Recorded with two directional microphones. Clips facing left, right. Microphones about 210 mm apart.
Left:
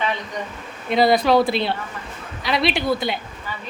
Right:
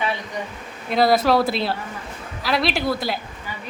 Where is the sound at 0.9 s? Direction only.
Centre (ahead or behind).